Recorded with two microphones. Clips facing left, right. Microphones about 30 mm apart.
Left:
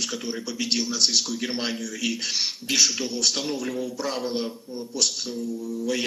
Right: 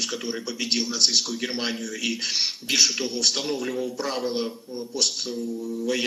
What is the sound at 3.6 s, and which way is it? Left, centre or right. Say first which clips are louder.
Speech: right 1 dB; right.